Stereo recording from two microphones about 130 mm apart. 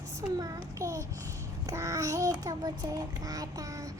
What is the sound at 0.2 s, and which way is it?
Child singing, 25° right (ahead or behind).